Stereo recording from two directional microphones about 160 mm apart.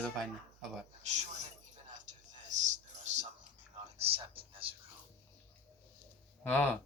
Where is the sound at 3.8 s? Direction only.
35° right (ahead or behind).